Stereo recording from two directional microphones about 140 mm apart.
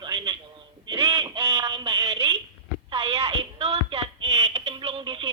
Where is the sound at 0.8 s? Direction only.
40° right (ahead or behind).